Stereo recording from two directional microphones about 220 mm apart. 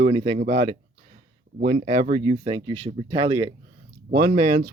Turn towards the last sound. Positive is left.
turn(degrees=-35)  # may be behind; listen again after turning